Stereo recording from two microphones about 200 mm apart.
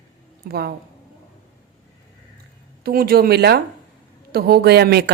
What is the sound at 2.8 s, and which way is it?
A woman's voice, 50° right (ahead or behind).